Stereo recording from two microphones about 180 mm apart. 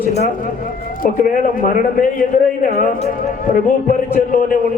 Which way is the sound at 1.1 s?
50° left (ahead or behind).